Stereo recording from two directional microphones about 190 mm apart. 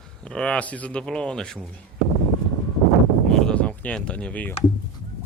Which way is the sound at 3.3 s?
5° left (ahead or behind).